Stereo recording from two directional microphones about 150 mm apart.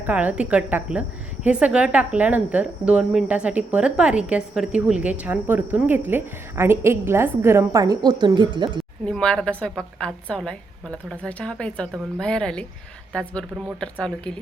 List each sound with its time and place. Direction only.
0.0 s a woman's voice: 10° right (ahead or behind); by 8.8 s 30° right (ahead or behind)
9.0 s a woman's voice: 5° left (ahead or behind)